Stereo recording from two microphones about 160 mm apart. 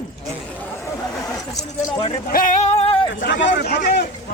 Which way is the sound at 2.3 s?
55° left (ahead or behind).